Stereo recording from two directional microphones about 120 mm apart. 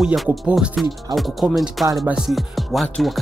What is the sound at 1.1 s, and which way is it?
Music, centre (ahead or behind).